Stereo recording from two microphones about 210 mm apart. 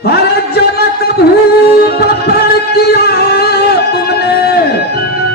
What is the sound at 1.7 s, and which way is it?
Music, 50° left (ahead or behind).